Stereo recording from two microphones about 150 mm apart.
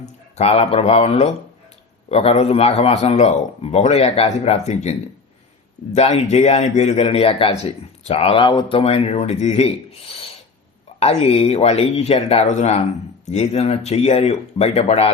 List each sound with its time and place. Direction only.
0.0 s a man's voice: 45° left (ahead or behind)